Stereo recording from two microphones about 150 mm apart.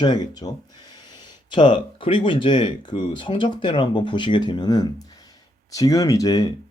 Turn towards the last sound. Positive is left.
turn(degrees=25)  # may be behind; listen again after turning